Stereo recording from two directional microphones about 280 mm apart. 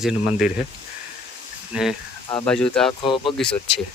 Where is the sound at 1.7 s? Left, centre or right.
Centre.